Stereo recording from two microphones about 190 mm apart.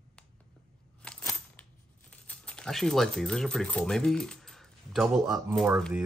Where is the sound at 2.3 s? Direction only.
5° left (ahead or behind).